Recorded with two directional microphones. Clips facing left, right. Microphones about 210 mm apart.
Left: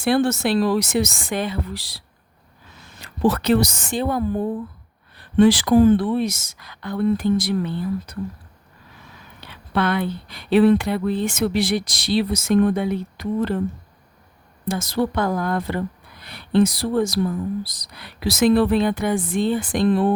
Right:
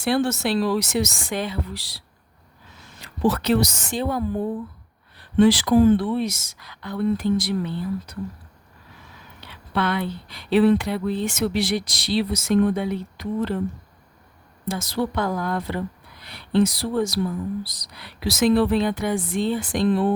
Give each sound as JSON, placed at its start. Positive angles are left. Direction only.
{"t": 0.0, "sound": "speech", "side_deg": 55}
{"t": 3.0, "sound": "a woman's voice", "side_deg": 50}
{"t": 5.4, "sound": "speech", "side_deg": 50}
{"t": 9.7, "sound": "speech", "side_deg": 50}
{"t": 14.7, "sound": "speech", "side_deg": 50}